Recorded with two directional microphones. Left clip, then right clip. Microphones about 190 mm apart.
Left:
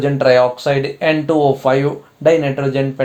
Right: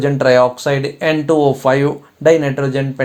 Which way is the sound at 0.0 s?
40° right (ahead or behind).